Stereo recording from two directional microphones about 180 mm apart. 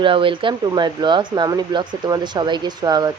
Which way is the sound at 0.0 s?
30° right (ahead or behind).